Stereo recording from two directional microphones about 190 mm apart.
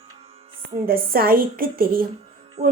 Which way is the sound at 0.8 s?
50° right (ahead or behind).